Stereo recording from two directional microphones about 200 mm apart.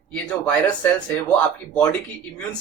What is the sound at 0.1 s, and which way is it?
Speech, 5° left (ahead or behind).